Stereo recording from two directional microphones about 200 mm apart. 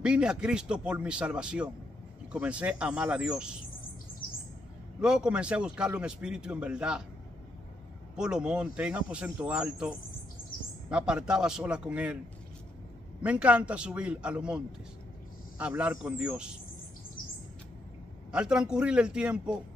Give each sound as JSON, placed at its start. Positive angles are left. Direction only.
{"t": 0.0, "sound": "a man's voice", "side_deg": -5}
{"t": 4.2, "sound": "bird", "side_deg": 45}
{"t": 5.0, "sound": "a man's voice", "side_deg": -5}
{"t": 8.2, "sound": "a man's voice", "side_deg": -5}
{"t": 13.2, "sound": "a man's voice", "side_deg": -5}
{"t": 18.3, "sound": "a man's voice", "side_deg": -5}